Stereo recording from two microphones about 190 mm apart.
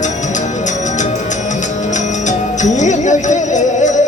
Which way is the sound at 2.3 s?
40° left (ahead or behind).